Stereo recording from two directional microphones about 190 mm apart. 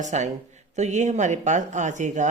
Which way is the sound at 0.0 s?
40° right (ahead or behind).